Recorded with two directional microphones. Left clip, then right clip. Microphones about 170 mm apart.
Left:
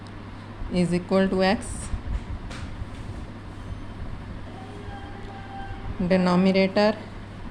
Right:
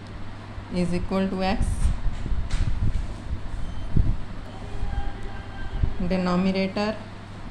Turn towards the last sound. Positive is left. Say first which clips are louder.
# left 6 dB
turn(degrees=35)  # may be behind; listen again after turning